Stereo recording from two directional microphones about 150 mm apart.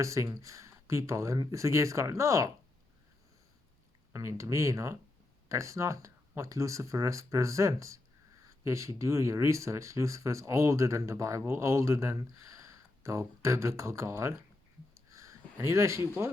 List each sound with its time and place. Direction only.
0.0 s speech: 20° right (ahead or behind)
4.1 s speech: 20° right (ahead or behind)
15.1 s a sound: 20° right (ahead or behind)
16.2 s speech: 20° right (ahead or behind)